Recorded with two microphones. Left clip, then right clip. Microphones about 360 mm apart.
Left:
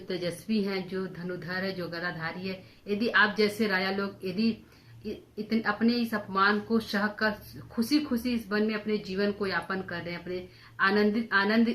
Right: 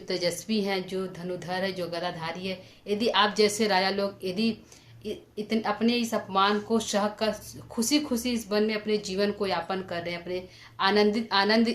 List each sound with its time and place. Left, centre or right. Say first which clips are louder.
0.1 s a woman's voice: right 4 dB; centre